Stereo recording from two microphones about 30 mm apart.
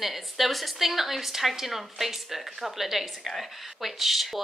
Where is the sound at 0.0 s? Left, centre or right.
Centre.